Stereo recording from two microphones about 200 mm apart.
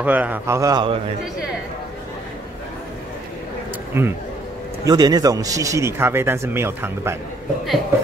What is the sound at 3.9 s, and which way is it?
Speech, 15° right (ahead or behind).